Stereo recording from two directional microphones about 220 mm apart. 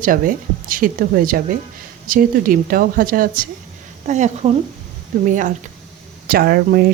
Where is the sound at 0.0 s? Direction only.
40° right (ahead or behind).